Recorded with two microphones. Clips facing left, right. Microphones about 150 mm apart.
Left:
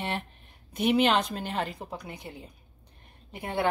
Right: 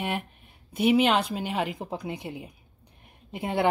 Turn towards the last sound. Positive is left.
turn(degrees=-20)  # may be behind; listen again after turning